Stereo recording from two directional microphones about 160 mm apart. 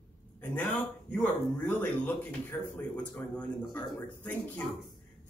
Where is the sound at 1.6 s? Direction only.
15° left (ahead or behind).